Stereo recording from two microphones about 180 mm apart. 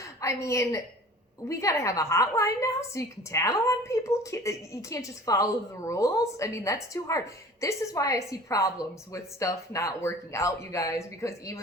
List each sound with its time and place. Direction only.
0.0 s a woman's voice: 15° left (ahead or behind)